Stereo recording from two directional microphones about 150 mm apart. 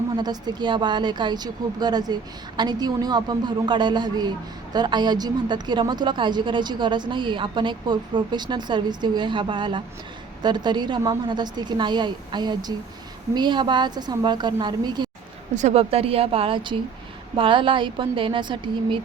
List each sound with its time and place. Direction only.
0.2 s a woman's voice: 30° right (ahead or behind)
15.5 s a man's voice: 45° right (ahead or behind)